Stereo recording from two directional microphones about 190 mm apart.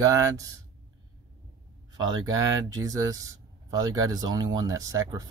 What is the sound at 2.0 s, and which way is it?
Speech, 20° right (ahead or behind).